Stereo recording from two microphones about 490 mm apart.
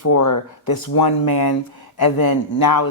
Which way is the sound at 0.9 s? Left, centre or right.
Left.